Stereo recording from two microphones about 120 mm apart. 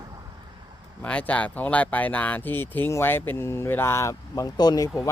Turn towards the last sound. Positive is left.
turn(degrees=30)  # may be behind; listen again after turning